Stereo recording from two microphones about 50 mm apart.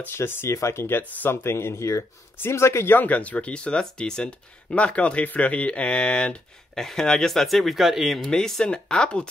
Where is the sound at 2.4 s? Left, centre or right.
Left.